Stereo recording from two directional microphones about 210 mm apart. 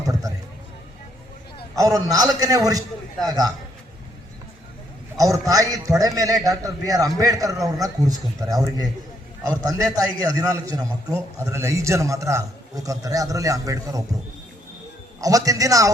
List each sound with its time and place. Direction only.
0.0 s a sound: 15° right (ahead or behind)
1.7 s a man's voice: 15° right (ahead or behind)
5.1 s a man's voice: 15° right (ahead or behind)
15.2 s a man's voice: 15° right (ahead or behind)